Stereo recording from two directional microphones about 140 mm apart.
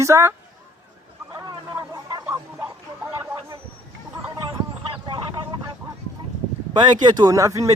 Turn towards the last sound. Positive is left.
turn(degrees=-25)  # may be behind; listen again after turning